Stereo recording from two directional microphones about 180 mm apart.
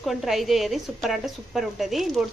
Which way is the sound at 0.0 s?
Centre (ahead or behind).